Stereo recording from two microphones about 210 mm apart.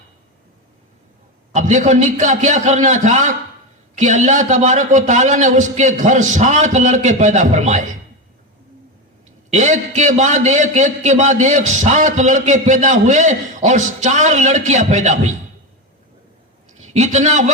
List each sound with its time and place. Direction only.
1.5 s a man's voice: 35° right (ahead or behind)
9.5 s a man's voice: 35° right (ahead or behind)
16.6 s a man's voice: 35° right (ahead or behind)